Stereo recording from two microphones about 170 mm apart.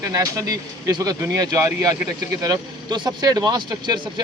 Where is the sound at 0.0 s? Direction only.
20° right (ahead or behind).